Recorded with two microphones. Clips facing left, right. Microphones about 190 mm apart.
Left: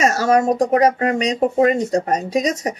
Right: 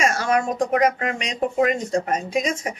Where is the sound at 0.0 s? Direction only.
40° left (ahead or behind).